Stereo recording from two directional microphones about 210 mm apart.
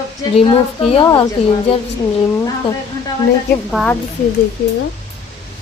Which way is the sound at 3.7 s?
Centre (ahead or behind).